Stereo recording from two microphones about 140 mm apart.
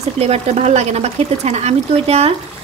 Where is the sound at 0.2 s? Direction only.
50° right (ahead or behind).